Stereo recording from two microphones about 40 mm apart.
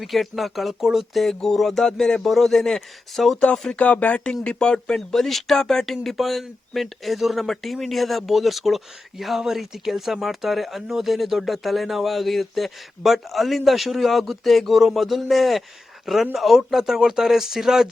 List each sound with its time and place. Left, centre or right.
0.0 s speech: centre
1.3 s speech: centre
3.8 s speech: left
4.4 s speech: left
5.1 s speech: centre